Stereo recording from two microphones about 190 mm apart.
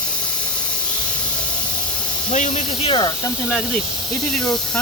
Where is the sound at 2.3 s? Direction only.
40° left (ahead or behind).